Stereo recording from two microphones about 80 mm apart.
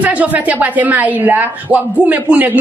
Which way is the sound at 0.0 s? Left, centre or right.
Centre.